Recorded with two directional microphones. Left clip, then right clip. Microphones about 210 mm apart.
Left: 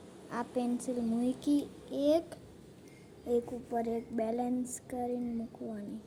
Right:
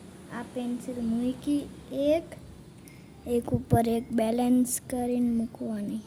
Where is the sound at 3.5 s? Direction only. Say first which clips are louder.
Right 9 dB; 35° right (ahead or behind).